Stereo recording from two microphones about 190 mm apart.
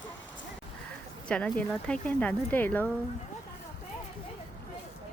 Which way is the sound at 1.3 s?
5° left (ahead or behind).